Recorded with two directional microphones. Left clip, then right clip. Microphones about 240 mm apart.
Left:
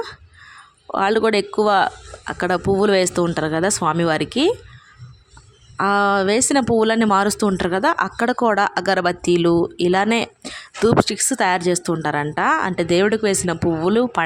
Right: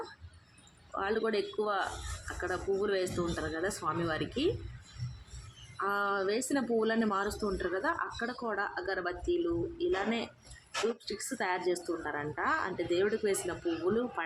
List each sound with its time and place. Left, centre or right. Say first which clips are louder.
0.9 s speech: left 15 dB; left
5.7 s speech: left 15 dB; left